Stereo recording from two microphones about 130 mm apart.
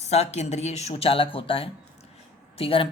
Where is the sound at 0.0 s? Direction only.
55° left (ahead or behind).